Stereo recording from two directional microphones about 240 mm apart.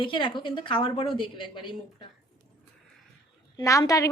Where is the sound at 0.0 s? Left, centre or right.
Left.